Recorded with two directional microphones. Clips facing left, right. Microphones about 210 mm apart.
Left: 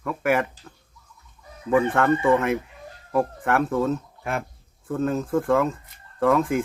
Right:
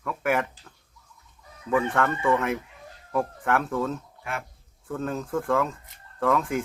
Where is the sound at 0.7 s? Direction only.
20° left (ahead or behind).